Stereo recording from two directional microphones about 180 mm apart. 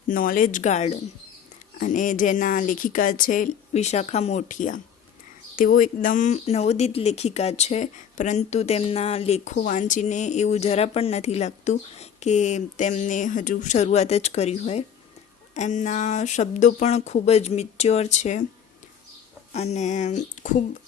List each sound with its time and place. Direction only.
0.1 s speech: 50° left (ahead or behind)
19.5 s speech: 40° left (ahead or behind)